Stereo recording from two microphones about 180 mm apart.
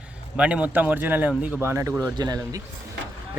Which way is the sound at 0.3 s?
5° right (ahead or behind).